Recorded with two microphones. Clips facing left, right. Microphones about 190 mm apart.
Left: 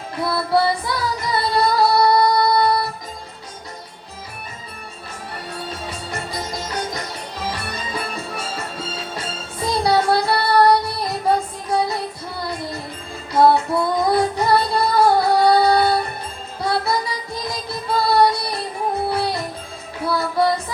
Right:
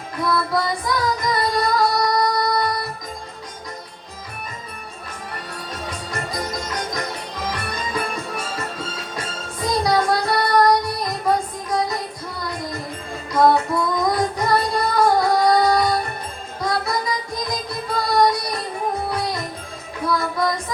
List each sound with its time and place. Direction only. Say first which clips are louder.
0.2 s singing: left 3 dB; 30° left (ahead or behind)
7.7 s music: right 2 dB; 30° left (ahead or behind)
13.3 s music: left 1 dB; 30° left (ahead or behind)